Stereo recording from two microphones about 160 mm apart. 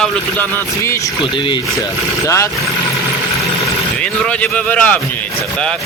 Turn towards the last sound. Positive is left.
turn(degrees=10)  # may be behind; listen again after turning